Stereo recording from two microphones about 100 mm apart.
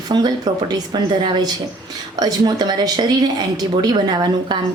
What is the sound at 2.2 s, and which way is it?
A woman's voice, 45° right (ahead or behind).